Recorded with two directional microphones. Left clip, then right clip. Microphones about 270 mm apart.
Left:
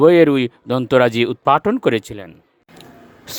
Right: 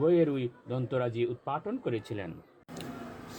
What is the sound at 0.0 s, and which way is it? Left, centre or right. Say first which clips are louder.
Mantra: left 15 dB; left.